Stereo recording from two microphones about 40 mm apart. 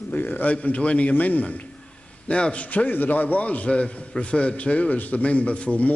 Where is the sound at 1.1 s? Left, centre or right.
Left.